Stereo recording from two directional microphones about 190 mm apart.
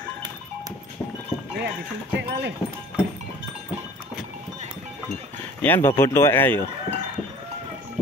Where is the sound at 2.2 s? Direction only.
60° right (ahead or behind).